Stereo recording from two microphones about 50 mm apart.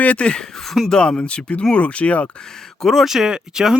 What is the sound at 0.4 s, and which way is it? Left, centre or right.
Speech, centre.